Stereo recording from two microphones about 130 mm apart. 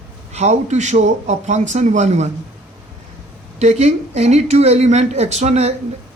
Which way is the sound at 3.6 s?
60° right (ahead or behind).